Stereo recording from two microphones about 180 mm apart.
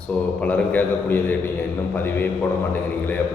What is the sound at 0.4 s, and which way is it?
Speech, 10° left (ahead or behind).